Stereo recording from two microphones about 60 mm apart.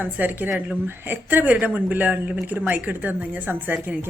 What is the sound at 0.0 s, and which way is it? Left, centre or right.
A woman's voice, right.